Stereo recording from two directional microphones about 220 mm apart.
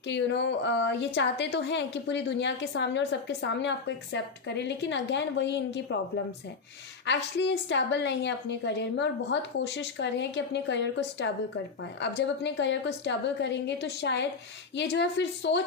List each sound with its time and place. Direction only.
0.1 s a woman's voice: 55° left (ahead or behind)
7.0 s a woman's voice: 55° left (ahead or behind)